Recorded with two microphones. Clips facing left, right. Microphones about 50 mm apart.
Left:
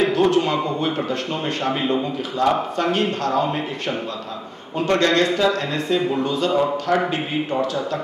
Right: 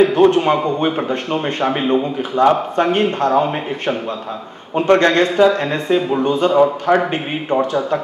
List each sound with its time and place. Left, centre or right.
0.1 s speech: right